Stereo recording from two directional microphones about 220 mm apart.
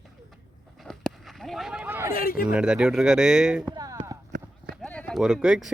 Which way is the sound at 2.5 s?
5° right (ahead or behind).